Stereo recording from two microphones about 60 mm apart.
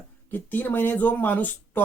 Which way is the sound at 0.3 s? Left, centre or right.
Left.